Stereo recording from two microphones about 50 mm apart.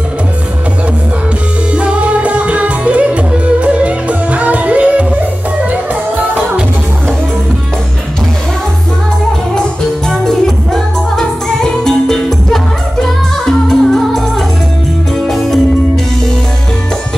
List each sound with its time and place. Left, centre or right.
1.8 s music: right
9.6 s music: centre
15.2 s music: centre